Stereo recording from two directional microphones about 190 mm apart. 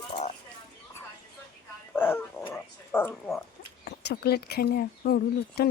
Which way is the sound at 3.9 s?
60° left (ahead or behind).